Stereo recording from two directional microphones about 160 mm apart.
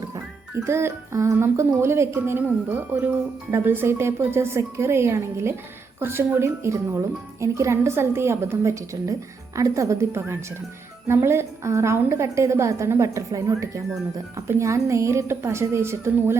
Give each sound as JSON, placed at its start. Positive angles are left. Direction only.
{"t": 0.6, "sound": "speech", "side_deg": -15}